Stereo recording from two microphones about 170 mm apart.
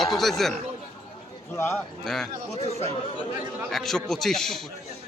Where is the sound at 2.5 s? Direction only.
35° left (ahead or behind).